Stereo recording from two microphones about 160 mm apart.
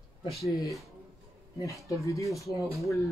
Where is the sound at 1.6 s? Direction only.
20° left (ahead or behind).